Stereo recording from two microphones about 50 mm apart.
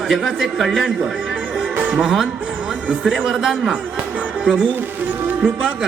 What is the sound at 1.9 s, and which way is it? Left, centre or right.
Music, right.